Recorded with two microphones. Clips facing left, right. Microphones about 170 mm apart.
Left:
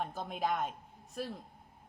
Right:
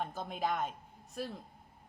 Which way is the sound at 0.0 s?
Centre (ahead or behind).